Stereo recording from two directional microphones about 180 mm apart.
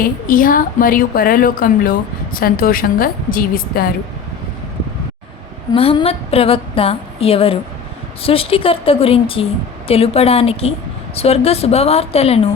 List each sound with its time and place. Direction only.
0.3 s a woman's voice: 50° left (ahead or behind)
5.7 s a woman's voice: 30° left (ahead or behind)